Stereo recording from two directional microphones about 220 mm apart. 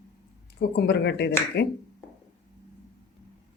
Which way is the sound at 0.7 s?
50° left (ahead or behind).